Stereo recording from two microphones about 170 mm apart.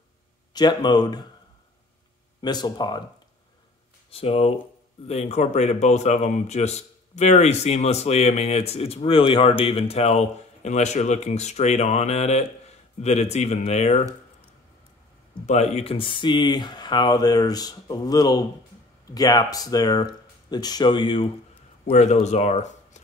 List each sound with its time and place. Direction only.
0.5 s speech: 25° left (ahead or behind)
2.4 s speech: 25° left (ahead or behind)
4.1 s a man's voice: 35° left (ahead or behind)
15.4 s speech: 40° left (ahead or behind)
21.8 s a man's voice: 40° left (ahead or behind)